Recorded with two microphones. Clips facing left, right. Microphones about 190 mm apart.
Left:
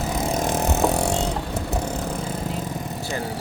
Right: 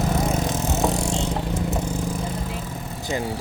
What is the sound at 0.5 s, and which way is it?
Music, 60° left (ahead or behind).